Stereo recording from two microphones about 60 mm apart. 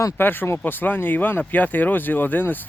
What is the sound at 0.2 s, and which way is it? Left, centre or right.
Speech, left.